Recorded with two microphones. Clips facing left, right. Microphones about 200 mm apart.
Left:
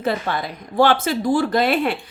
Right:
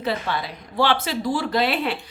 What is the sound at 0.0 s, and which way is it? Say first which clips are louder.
Speech: left 3 dB; 50° left (ahead or behind).